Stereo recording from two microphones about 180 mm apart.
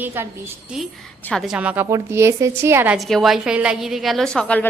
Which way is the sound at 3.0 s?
Centre (ahead or behind).